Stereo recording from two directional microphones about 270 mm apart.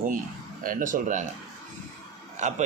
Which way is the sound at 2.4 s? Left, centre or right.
Right.